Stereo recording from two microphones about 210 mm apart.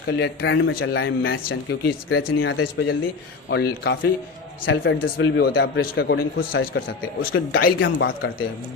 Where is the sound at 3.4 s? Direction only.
55° left (ahead or behind).